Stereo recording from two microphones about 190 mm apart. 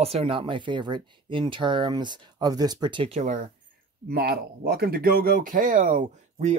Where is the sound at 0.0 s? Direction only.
30° right (ahead or behind).